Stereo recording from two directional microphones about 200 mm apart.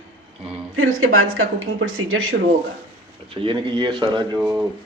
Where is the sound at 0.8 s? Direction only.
90° right.